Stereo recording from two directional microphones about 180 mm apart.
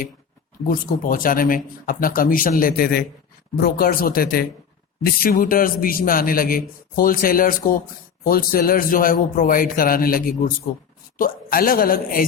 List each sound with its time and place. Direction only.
0.7 s a man's voice: 50° left (ahead or behind)